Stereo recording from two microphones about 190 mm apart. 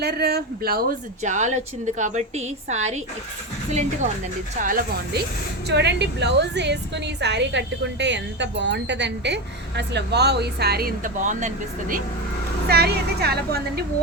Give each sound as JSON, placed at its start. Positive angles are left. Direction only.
{"t": 0.0, "sound": "a woman's voice", "side_deg": -55}
{"t": 1.2, "sound": "a woman's voice", "side_deg": -40}
{"t": 5.6, "sound": "a woman's voice", "side_deg": -65}
{"t": 12.6, "sound": "a woman's voice", "side_deg": -55}